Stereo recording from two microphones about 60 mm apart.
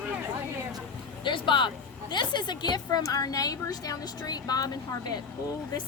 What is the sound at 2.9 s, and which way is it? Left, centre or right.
A woman's voice, left.